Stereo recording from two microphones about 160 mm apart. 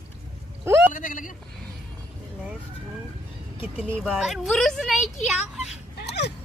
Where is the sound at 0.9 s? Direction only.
55° left (ahead or behind).